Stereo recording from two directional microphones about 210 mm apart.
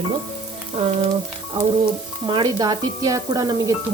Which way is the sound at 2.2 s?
20° right (ahead or behind).